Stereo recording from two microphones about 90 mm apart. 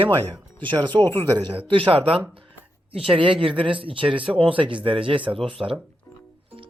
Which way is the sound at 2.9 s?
90° right.